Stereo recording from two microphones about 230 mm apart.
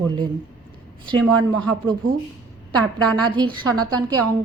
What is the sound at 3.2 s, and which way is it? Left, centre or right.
Speech, centre.